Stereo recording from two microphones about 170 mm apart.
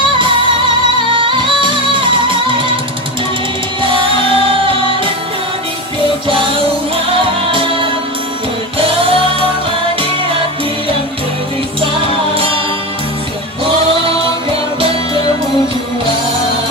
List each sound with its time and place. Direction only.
1.2 s music: 30° right (ahead or behind)
3.8 s music: 30° right (ahead or behind)
7.5 s music: 30° right (ahead or behind)